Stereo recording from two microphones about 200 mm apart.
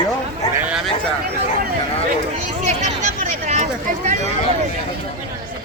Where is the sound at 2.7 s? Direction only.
35° right (ahead or behind).